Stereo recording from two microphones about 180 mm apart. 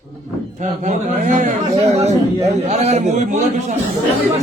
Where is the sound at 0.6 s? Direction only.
45° right (ahead or behind).